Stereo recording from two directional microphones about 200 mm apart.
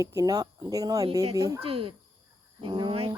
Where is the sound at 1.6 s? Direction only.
25° right (ahead or behind).